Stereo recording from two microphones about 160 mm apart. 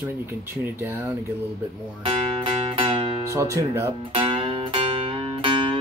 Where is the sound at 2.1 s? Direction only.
35° right (ahead or behind).